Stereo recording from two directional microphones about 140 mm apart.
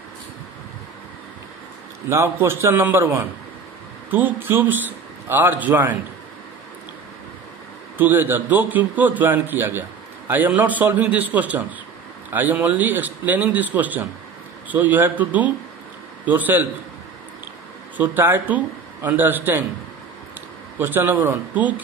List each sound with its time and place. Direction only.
2.0 s a man's voice: 20° right (ahead or behind)
8.0 s a man's voice: 15° right (ahead or behind)
17.9 s a man's voice: 15° right (ahead or behind)
20.8 s a man's voice: 15° right (ahead or behind)